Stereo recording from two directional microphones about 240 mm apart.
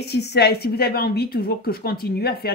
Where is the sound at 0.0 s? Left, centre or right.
Left.